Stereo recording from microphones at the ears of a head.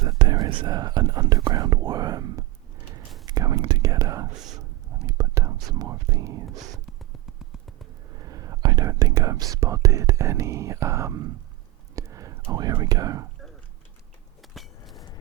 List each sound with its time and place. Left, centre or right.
0.0 s whispering: right
8.1 s speech: right
11.9 s whispering: right
14.8 s hammer: left